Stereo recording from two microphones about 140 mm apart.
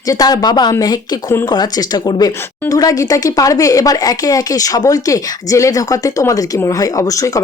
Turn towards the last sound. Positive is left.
turn(degrees=25)  # may be behind; listen again after turning